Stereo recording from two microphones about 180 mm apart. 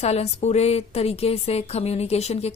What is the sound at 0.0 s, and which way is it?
Speech, 35° left (ahead or behind).